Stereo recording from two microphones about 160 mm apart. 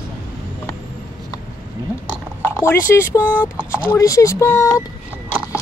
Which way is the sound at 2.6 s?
15° left (ahead or behind).